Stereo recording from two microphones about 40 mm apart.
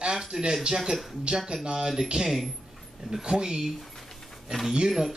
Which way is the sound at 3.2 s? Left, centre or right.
Centre.